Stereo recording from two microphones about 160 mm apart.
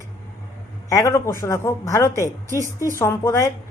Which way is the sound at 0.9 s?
20° left (ahead or behind).